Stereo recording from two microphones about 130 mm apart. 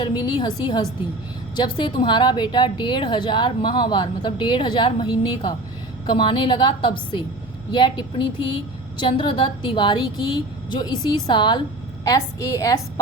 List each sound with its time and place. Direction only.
0.0 s a woman's voice: 35° left (ahead or behind)
12.0 s a woman's voice: 25° left (ahead or behind)